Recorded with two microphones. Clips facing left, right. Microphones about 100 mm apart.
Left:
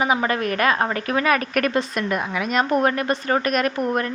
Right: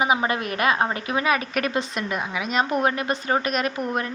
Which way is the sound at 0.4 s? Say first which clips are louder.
Left 3 dB; 40° left (ahead or behind).